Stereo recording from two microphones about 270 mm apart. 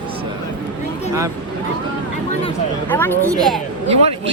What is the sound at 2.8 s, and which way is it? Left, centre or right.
Speech, centre.